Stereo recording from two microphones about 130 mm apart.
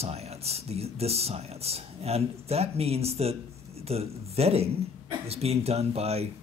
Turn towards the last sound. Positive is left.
turn(degrees=-50)  # may be behind; listen again after turning